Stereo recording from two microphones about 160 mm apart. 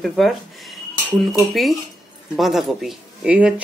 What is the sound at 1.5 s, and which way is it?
Speech, centre (ahead or behind).